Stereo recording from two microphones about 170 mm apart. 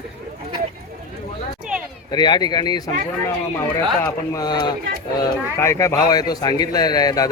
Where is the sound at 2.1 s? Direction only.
25° left (ahead or behind).